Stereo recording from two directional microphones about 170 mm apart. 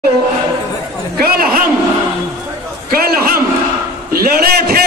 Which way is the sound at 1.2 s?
60° right (ahead or behind).